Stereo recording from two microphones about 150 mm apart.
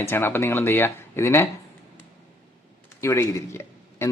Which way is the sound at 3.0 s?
20° left (ahead or behind).